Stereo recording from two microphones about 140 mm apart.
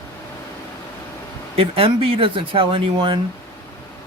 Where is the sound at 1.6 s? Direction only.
40° right (ahead or behind).